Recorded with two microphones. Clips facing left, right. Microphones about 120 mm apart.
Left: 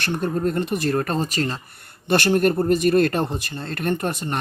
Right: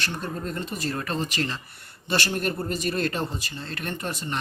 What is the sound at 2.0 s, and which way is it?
Speech, 55° left (ahead or behind).